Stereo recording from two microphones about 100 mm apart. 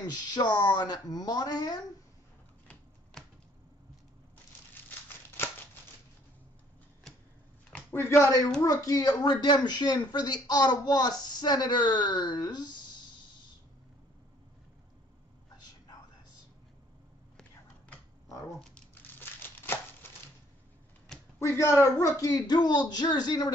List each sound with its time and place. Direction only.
0.0 s speech: 40° left (ahead or behind)
7.9 s speech: 25° left (ahead or behind)
8.6 s speech: 35° left (ahead or behind)
19.1 s crumpling: 20° left (ahead or behind)
21.4 s speech: 30° left (ahead or behind)